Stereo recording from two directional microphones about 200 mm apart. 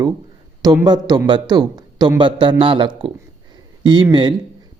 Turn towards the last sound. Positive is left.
turn(degrees=-20)  # may be behind; listen again after turning